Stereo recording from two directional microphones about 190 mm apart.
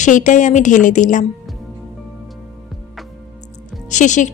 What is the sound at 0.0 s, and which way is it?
A woman's voice, 40° left (ahead or behind).